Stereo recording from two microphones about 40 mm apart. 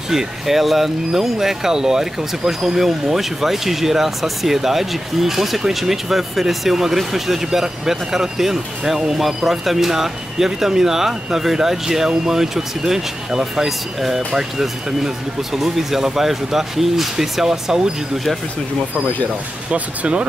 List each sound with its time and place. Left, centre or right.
0.1 s speech: centre
19.7 s speech: right